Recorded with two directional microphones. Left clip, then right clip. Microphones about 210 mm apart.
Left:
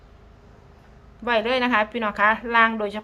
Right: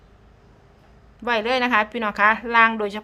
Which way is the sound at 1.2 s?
15° right (ahead or behind).